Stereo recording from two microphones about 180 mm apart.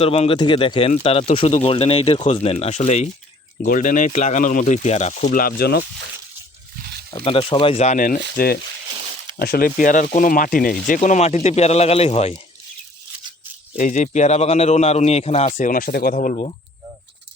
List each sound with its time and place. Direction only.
0.0 s speech: 30° left (ahead or behind)
5.3 s speech: 55° left (ahead or behind)
7.3 s speech: 30° left (ahead or behind); by 8.2 s 50° left (ahead or behind)
9.4 s speech: 55° left (ahead or behind); by 12.4 s 35° left (ahead or behind)
13.7 s speech: 45° left (ahead or behind)